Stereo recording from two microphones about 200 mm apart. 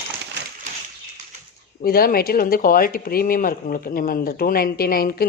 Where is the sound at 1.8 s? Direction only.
50° left (ahead or behind).